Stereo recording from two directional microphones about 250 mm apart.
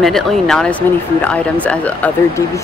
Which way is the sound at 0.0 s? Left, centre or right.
Centre.